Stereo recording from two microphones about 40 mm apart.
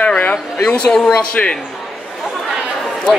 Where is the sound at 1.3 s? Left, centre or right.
Left.